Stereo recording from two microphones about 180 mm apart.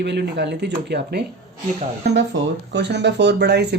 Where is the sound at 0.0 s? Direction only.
65° right (ahead or behind).